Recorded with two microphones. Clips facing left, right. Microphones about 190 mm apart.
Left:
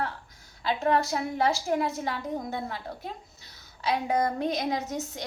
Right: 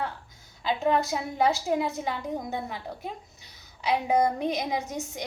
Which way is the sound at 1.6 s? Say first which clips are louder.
Even; 20° right (ahead or behind).